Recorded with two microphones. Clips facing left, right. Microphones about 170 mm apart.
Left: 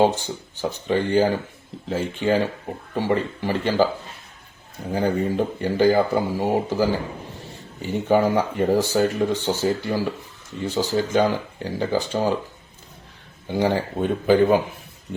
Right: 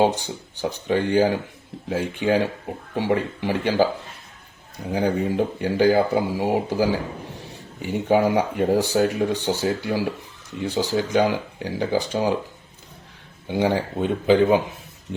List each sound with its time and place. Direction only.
0.0 s speech: 15° right (ahead or behind)
4.9 s speech: 10° right (ahead or behind)
13.5 s speech: 15° right (ahead or behind)